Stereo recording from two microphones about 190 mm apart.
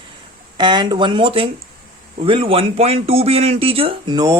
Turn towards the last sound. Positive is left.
turn(degrees=-20)  # may be behind; listen again after turning